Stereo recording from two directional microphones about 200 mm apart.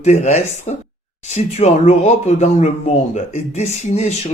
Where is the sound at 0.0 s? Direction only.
35° left (ahead or behind).